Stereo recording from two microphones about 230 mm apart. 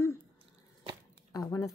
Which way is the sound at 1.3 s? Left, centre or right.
Centre.